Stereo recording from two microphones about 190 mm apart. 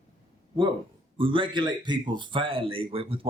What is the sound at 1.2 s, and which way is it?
Speech, 25° right (ahead or behind).